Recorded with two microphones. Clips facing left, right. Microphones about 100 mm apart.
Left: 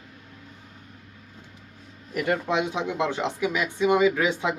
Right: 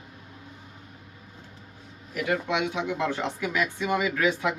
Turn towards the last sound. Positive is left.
turn(degrees=20)  # may be behind; listen again after turning